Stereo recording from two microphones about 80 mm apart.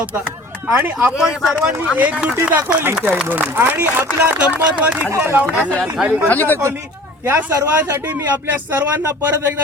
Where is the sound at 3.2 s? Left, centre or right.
Right.